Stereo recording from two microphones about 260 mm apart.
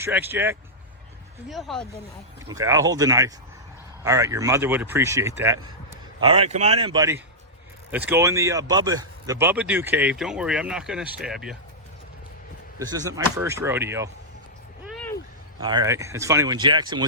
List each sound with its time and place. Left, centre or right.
0.0 s speech: centre
2.5 s speech: centre
12.8 s speech: centre
14.8 s a sound: centre
15.6 s speech: centre